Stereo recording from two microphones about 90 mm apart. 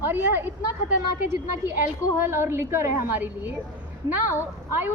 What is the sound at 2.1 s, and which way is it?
A woman's voice, 25° right (ahead or behind).